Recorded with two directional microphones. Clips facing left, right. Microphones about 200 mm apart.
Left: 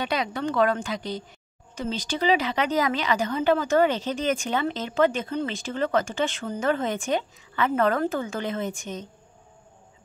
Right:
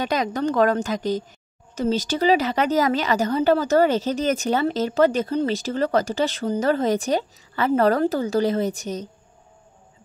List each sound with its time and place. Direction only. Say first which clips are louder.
0.0 s a woman's voice: right 4 dB; 40° right (ahead or behind)